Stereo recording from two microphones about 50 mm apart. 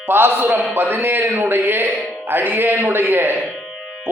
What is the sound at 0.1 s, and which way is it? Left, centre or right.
A man's voice, right.